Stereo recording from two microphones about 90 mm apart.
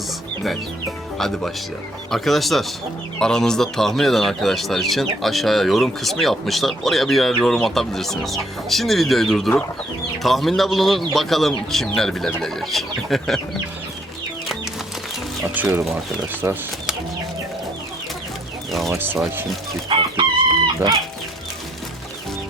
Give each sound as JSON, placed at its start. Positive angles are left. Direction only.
{"t": 0.4, "sound": "speech", "side_deg": 0}
{"t": 14.4, "sound": "music", "side_deg": 0}
{"t": 15.5, "sound": "speech", "side_deg": -20}
{"t": 18.7, "sound": "speech", "side_deg": 0}
{"t": 18.9, "sound": "speech", "side_deg": -25}
{"t": 19.9, "sound": "chicken", "side_deg": -65}